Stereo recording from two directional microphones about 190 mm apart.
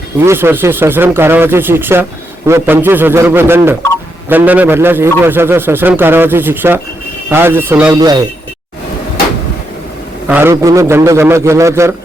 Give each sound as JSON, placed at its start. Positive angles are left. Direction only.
{"t": 0.2, "sound": "a man's voice", "side_deg": -15}
{"t": 7.9, "sound": "speech", "side_deg": -20}
{"t": 10.2, "sound": "a man's voice", "side_deg": -10}